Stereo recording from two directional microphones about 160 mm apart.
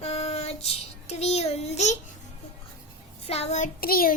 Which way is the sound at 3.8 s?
65° left (ahead or behind).